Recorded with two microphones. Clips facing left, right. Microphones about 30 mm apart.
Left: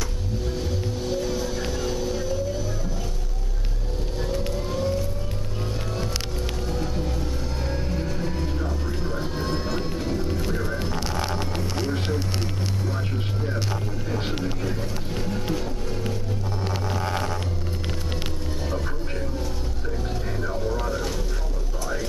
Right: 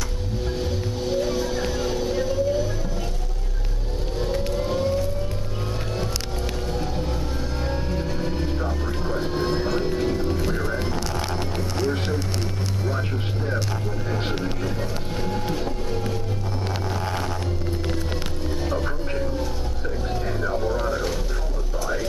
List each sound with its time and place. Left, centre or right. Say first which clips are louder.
0.6 s music: right 2 dB; centre
1.6 s vehicle: right 2 dB; centre
4.5 s vehicle: right 3 dB; centre
7.6 s music: right 1 dB; centre
11.1 s a sound: even; centre
14.1 s a sound: even; centre
20.3 s vehicle: right 2 dB; centre